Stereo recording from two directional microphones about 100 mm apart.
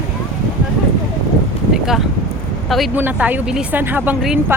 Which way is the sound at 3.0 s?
15° right (ahead or behind).